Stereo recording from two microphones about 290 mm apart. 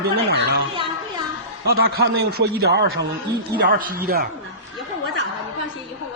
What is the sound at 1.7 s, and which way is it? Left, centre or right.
A man's voice, right.